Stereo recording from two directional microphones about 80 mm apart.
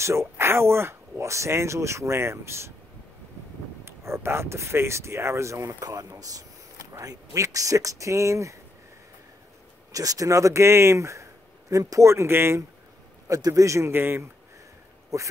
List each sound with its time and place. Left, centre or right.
0.0 s speech: right
3.8 s speech: right
9.9 s speech: right
13.3 s a man's voice: right
13.9 s speech: right
15.1 s speech: right